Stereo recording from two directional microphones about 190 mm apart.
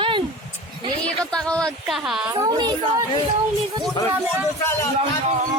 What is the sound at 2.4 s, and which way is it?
Speech, 20° right (ahead or behind).